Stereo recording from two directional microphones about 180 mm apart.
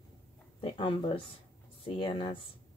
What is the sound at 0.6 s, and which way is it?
Speech, 30° left (ahead or behind).